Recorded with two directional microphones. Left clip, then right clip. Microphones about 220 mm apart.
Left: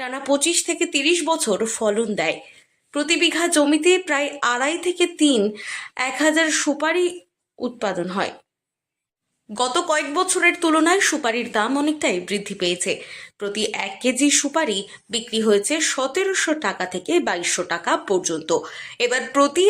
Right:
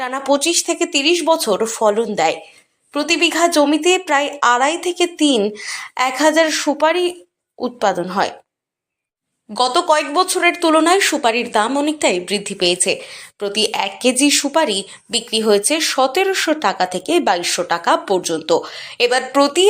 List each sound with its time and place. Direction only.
0.0 s speech: centre (ahead or behind)
9.5 s speech: 5° left (ahead or behind)